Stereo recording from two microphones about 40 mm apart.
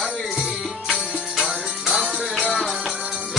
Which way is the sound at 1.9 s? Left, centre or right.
Centre.